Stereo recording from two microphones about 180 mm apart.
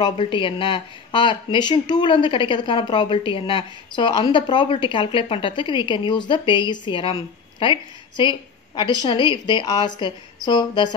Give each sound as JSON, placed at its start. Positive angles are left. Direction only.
{"t": 0.0, "sound": "speech", "side_deg": 30}